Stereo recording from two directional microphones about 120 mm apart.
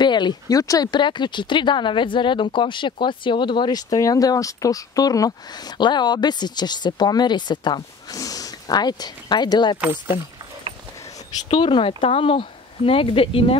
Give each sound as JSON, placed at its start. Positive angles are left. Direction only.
{"t": 0.0, "sound": "speech", "side_deg": 40}
{"t": 10.7, "sound": "a sound", "side_deg": -45}
{"t": 11.4, "sound": "speech", "side_deg": 45}